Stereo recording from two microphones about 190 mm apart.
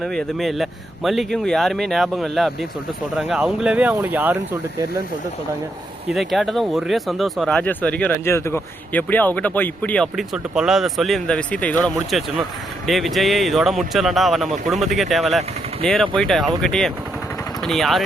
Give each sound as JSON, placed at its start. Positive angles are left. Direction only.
{"t": 0.0, "sound": "speech", "side_deg": 0}
{"t": 6.1, "sound": "speech", "side_deg": 0}